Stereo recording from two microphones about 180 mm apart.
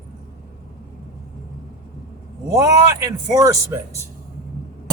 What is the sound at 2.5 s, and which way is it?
Speech, 15° right (ahead or behind).